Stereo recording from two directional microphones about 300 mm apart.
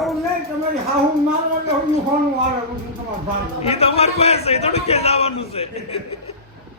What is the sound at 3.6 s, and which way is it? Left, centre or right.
A man's voice, centre.